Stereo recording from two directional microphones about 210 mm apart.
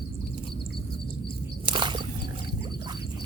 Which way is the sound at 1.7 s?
20° right (ahead or behind).